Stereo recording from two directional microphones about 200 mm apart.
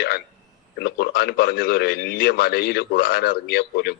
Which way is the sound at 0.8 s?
55° left (ahead or behind).